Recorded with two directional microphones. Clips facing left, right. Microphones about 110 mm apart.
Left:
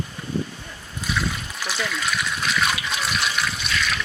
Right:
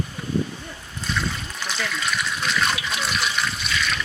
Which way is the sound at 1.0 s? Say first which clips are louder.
Left 1 dB; 5° left (ahead or behind).